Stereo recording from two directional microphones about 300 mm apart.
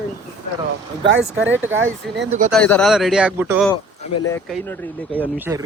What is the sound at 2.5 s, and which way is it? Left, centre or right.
A man's voice, centre.